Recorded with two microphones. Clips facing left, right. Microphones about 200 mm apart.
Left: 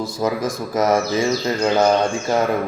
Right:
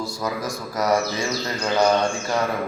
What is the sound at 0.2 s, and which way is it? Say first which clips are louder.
Mantra: left 8 dB; 25° left (ahead or behind).